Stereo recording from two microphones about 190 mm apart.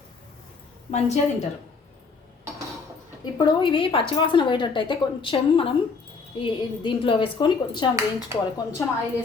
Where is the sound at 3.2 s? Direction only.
25° left (ahead or behind).